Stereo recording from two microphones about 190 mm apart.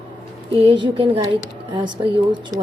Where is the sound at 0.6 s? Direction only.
25° right (ahead or behind).